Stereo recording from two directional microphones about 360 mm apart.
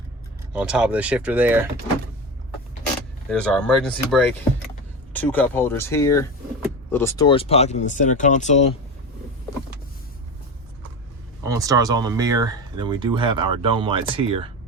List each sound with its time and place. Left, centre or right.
0.5 s speech: centre
3.2 s speech: centre
11.4 s speech: centre